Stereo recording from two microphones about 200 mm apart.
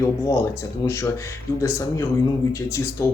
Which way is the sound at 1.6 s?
15° left (ahead or behind).